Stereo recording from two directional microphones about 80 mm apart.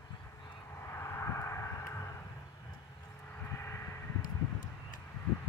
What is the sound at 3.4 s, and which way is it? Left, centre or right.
Vehicle, left.